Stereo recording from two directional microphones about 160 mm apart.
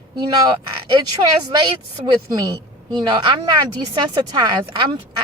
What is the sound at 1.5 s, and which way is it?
Speech, 25° right (ahead or behind).